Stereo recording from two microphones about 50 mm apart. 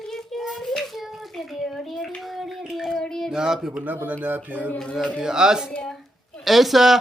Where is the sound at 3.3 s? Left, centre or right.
Centre.